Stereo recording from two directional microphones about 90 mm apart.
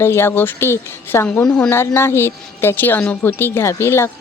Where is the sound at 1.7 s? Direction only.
25° left (ahead or behind).